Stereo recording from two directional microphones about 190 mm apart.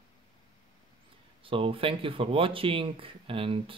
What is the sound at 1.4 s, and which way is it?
Speech, 30° right (ahead or behind).